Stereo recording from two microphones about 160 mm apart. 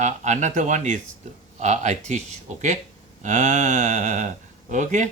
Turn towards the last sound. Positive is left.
turn(degrees=-50)  # may be behind; listen again after turning